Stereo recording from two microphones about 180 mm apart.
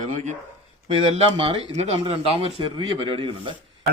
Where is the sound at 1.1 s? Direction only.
30° right (ahead or behind).